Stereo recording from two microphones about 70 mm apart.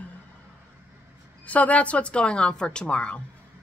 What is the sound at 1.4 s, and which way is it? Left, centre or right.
Speech, centre.